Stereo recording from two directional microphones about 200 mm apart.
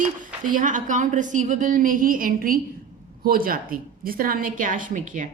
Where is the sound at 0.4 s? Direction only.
40° right (ahead or behind).